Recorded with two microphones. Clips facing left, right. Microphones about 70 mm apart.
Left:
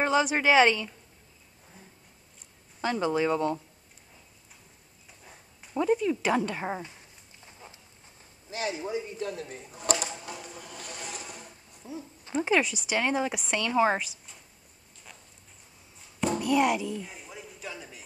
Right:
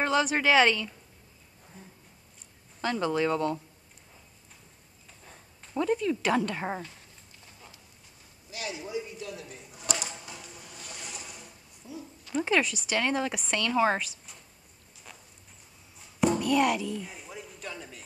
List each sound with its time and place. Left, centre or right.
0.0 s a woman's voice: centre
2.8 s a woman's voice: centre
5.2 s a sound: centre
7.4 s horse: left
8.5 s speech: left
10.4 s a sound: left
10.9 s speech: left; by 14.1 s centre
16.3 s music: centre